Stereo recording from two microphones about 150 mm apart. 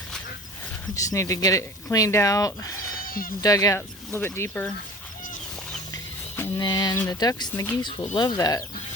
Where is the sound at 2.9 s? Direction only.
70° left (ahead or behind).